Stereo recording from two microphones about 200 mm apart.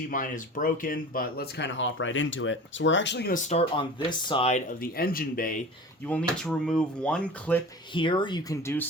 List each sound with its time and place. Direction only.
0.1 s speech: 40° left (ahead or behind); by 3.3 s 60° left (ahead or behind)
3.3 s speech: 35° left (ahead or behind)
4.8 s speech: 50° left (ahead or behind)
6.1 s speech: 5° left (ahead or behind)
7.9 s speech: 25° left (ahead or behind)